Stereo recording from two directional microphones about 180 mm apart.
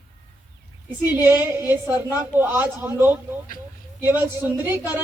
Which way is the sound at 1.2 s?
10° right (ahead or behind).